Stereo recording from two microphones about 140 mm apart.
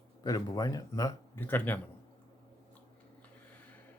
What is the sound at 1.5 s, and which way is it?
Speech, 15° left (ahead or behind).